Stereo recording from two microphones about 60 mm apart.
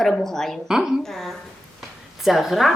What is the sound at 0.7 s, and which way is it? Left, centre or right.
Speech, centre.